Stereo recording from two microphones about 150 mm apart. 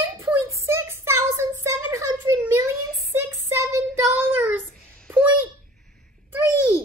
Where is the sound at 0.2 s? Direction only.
15° right (ahead or behind).